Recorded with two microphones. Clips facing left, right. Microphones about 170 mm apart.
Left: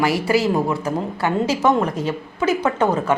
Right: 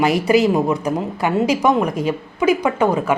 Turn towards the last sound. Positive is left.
turn(degrees=-10)  # may be behind; listen again after turning